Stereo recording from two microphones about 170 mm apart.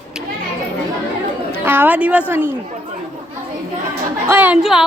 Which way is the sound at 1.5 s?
10° right (ahead or behind).